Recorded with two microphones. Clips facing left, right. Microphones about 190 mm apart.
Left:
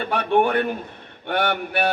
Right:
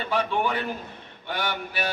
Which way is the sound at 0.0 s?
60° left (ahead or behind).